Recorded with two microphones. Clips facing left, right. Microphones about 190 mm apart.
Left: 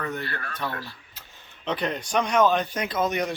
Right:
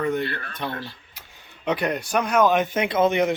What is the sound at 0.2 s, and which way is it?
Speech, 25° right (ahead or behind).